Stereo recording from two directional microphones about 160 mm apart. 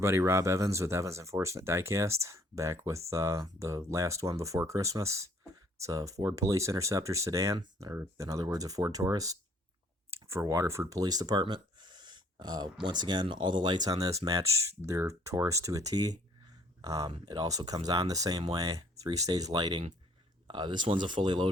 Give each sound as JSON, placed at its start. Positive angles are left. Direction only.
{"t": 0.0, "sound": "speech", "side_deg": -15}